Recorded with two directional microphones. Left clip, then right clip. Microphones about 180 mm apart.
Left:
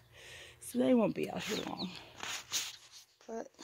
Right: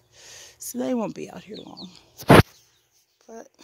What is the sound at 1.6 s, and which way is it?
Speech, centre (ahead or behind).